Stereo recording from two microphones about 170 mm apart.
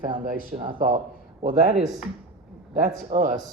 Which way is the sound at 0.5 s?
30° right (ahead or behind).